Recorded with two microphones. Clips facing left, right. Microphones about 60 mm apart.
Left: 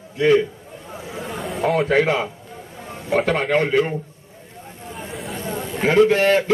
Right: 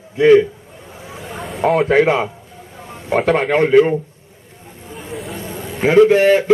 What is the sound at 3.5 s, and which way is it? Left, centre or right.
Speech, centre.